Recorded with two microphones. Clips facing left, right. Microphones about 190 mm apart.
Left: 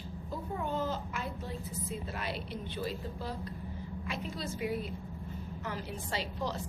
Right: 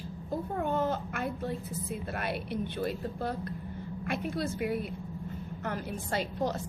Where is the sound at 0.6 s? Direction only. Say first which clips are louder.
Right 4 dB; 55° right (ahead or behind).